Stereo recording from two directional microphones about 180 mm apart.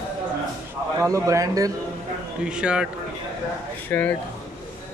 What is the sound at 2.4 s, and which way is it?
Speech, 5° right (ahead or behind).